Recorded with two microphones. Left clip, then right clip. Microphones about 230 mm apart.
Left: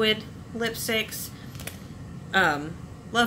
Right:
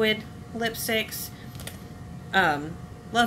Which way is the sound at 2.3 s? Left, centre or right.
Centre.